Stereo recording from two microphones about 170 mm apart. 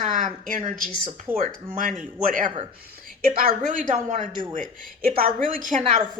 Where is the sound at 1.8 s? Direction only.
50° right (ahead or behind).